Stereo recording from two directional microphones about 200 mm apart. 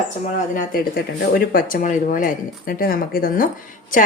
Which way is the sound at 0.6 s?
45° left (ahead or behind).